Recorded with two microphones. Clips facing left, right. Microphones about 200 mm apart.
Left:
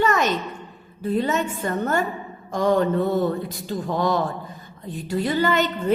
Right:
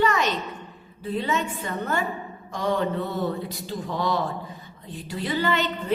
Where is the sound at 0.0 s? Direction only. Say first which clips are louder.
Left 2 dB; 45° left (ahead or behind).